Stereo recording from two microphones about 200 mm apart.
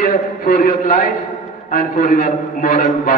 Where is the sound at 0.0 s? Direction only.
45° left (ahead or behind).